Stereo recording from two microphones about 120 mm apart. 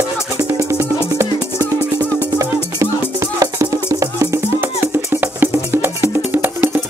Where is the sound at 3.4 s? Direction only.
30° right (ahead or behind).